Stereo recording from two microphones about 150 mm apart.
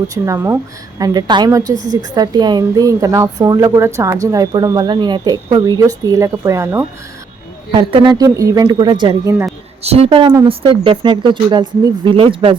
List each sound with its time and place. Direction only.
0.1 s speech: 20° right (ahead or behind)
7.7 s speech: 35° right (ahead or behind)
9.8 s speech: 45° right (ahead or behind)